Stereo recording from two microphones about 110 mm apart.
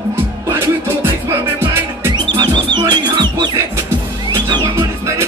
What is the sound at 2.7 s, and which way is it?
Music, 40° right (ahead or behind).